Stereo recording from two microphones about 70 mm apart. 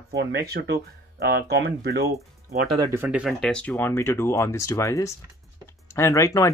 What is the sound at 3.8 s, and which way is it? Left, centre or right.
Speech, left.